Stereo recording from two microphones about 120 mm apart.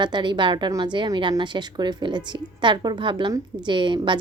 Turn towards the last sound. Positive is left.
turn(degrees=-40)  # may be behind; listen again after turning